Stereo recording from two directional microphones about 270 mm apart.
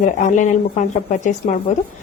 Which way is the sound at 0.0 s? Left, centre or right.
Left.